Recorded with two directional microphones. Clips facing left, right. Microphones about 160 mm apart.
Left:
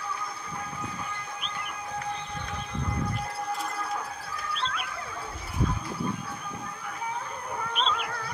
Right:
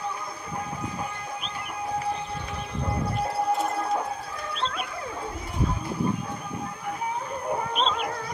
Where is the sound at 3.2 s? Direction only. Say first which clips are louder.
Right 7 dB; 25° right (ahead or behind).